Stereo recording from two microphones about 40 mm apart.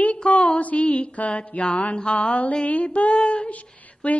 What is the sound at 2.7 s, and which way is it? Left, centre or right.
Female singing, left.